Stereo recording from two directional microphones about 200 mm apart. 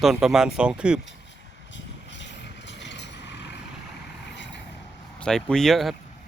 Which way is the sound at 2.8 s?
60° left (ahead or behind).